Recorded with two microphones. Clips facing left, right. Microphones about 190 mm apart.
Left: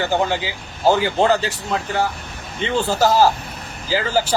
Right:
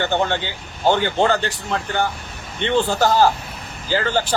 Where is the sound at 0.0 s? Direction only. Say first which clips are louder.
Left 1 dB; 5° left (ahead or behind).